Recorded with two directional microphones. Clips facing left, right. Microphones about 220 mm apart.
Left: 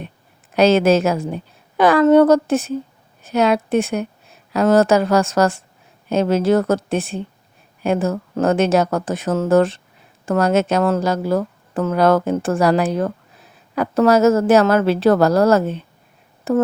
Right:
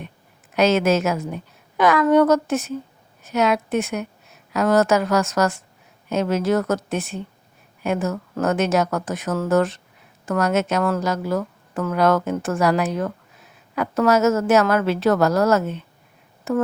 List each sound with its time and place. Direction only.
0.5 s speech: 30° left (ahead or behind)